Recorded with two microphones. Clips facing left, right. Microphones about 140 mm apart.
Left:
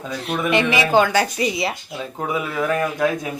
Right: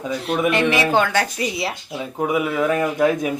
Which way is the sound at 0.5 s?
Centre (ahead or behind).